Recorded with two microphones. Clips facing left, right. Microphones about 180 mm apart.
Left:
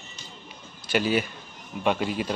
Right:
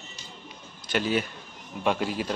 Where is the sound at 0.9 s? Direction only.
5° left (ahead or behind).